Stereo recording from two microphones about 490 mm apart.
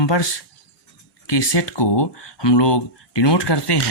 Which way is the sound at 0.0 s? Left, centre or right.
Left.